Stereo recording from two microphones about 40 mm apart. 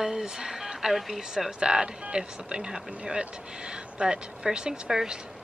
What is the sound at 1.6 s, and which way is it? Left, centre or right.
A woman's voice, right.